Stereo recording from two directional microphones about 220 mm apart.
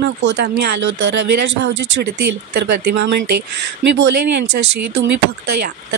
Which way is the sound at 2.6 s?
45° right (ahead or behind).